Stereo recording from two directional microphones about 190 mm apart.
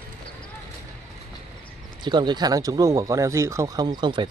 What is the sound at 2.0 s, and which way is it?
Speech, 25° right (ahead or behind).